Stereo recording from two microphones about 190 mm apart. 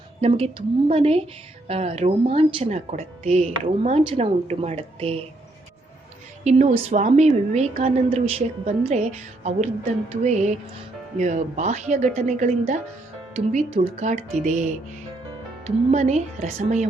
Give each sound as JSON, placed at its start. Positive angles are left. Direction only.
{"t": 0.2, "sound": "a woman's voice", "side_deg": -30}
{"t": 6.4, "sound": "a woman's voice", "side_deg": -35}